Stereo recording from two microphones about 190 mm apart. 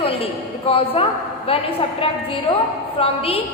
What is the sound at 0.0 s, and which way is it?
A woman's voice, 30° left (ahead or behind).